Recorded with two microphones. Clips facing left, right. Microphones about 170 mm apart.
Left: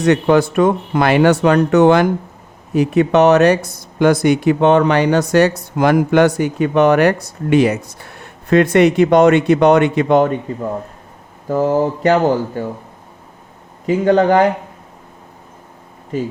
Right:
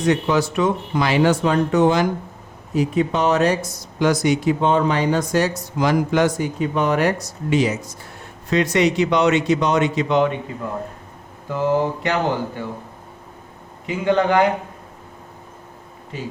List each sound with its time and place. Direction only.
0.0 s speech: 65° left (ahead or behind)
11.4 s speech: 40° left (ahead or behind)
13.8 s speech: 40° left (ahead or behind)
16.1 s speech: 45° left (ahead or behind)